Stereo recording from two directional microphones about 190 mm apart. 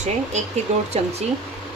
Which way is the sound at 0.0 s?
35° right (ahead or behind).